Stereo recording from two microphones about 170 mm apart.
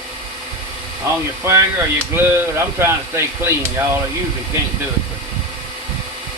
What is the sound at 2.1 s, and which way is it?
Speech, 15° right (ahead or behind).